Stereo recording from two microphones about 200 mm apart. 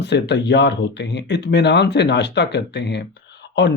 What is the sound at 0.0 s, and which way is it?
Speech, 60° left (ahead or behind).